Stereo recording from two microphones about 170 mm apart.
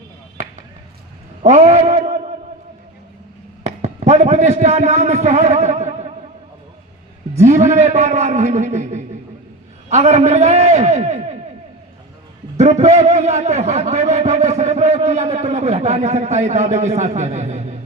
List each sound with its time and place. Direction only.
1.4 s a sound: 40° right (ahead or behind)
3.8 s a man's voice: 40° right (ahead or behind)
7.3 s a man's voice: 40° right (ahead or behind)
12.5 s a man's voice: 45° right (ahead or behind)